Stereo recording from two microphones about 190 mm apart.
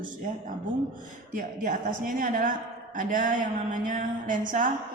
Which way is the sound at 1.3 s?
40° right (ahead or behind).